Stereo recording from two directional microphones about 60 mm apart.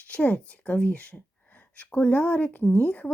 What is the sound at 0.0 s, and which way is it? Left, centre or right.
Speech, left.